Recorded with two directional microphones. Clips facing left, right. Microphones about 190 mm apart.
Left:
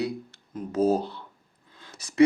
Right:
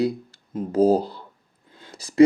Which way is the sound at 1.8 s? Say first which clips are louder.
Right 5 dB; 30° right (ahead or behind).